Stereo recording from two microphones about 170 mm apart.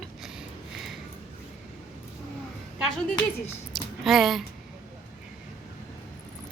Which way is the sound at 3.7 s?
Centre (ahead or behind).